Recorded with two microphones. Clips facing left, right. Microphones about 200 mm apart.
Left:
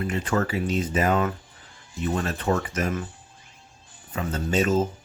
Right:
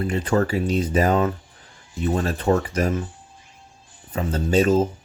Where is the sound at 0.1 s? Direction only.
35° right (ahead or behind).